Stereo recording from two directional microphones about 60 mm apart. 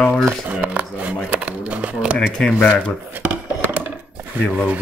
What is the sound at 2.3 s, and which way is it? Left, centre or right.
Speech, centre.